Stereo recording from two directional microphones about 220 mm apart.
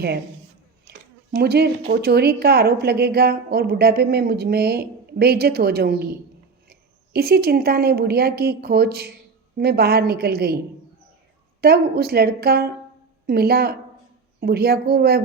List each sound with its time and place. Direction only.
0.9 s a sound: 45° right (ahead or behind)
1.4 s a woman's voice: 45° right (ahead or behind)
11.6 s a woman's voice: 45° right (ahead or behind)